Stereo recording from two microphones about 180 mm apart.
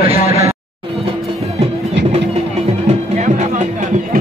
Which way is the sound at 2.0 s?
80° right.